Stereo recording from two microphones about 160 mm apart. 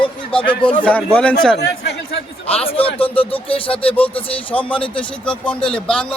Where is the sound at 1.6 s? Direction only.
90° left.